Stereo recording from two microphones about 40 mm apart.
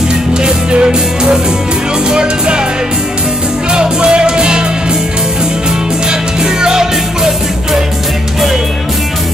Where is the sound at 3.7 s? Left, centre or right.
Right.